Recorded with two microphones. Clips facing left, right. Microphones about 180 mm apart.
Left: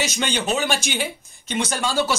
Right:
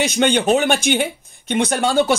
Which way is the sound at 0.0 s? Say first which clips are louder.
Right 8 dB; 55° right (ahead or behind).